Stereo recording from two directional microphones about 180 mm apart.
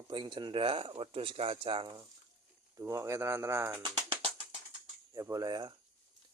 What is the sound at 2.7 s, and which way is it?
Speech, 15° right (ahead or behind).